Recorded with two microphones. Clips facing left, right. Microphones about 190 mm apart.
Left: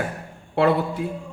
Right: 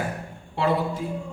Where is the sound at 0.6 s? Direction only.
60° left (ahead or behind).